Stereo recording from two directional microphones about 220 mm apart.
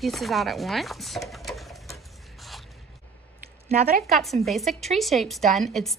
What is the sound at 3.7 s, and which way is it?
Speech, 40° right (ahead or behind).